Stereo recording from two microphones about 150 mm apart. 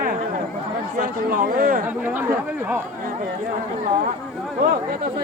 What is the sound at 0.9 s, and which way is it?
Speech, 65° right (ahead or behind).